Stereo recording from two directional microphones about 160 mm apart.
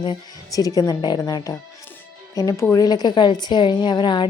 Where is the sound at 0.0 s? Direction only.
25° left (ahead or behind).